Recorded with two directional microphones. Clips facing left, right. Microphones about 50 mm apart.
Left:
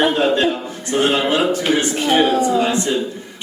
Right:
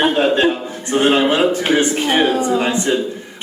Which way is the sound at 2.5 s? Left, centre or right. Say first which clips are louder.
Even; right.